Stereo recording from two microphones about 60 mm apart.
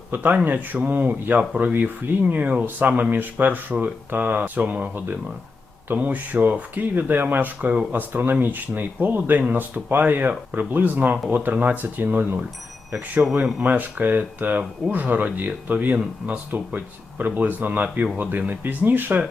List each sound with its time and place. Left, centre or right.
0.1 s speech: right
13.3 s speech: centre
13.7 s speech: right